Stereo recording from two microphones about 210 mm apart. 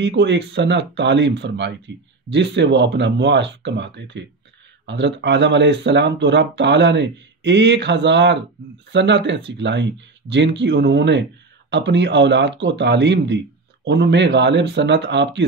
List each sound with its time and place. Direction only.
0.0 s speech: 55° right (ahead or behind)